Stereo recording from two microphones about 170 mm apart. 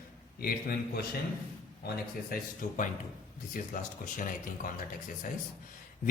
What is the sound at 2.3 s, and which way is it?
A man's voice, 50° left (ahead or behind).